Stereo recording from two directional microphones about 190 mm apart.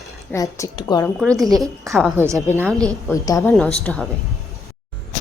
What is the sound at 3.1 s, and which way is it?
Speech, 15° left (ahead or behind).